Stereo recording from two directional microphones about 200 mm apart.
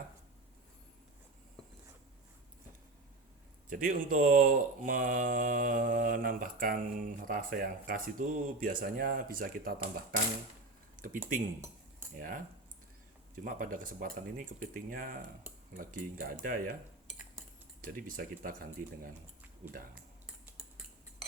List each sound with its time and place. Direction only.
3.7 s speech: 45° right (ahead or behind)
17.8 s speech: 45° right (ahead or behind)
20.4 s cutlery: 5° right (ahead or behind)